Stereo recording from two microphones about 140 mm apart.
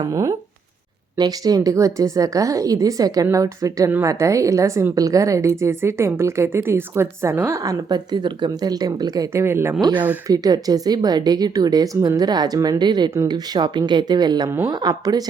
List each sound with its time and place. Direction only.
0.0 s a woman's voice: 25° right (ahead or behind)
10.2 s a woman's voice: 25° right (ahead or behind)